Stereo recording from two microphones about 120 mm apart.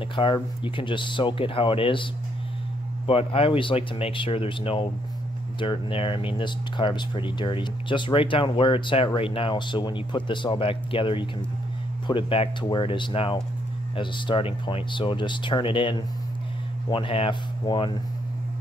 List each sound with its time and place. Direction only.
0.0 s speech: 45° left (ahead or behind)
3.1 s speech: 50° left (ahead or behind)